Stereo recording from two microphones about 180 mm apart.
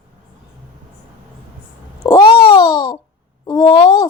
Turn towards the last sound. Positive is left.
turn(degrees=25)  # may be behind; listen again after turning